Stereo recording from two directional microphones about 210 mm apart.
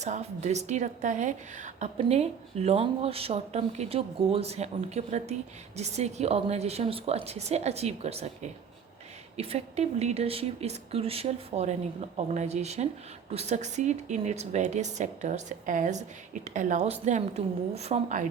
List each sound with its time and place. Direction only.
0.0 s a woman's voice: 35° right (ahead or behind)